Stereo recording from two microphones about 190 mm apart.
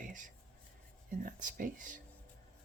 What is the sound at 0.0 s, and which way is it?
Writing, 40° right (ahead or behind).